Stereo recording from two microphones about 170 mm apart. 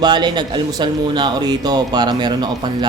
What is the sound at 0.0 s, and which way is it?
Speech, 25° right (ahead or behind).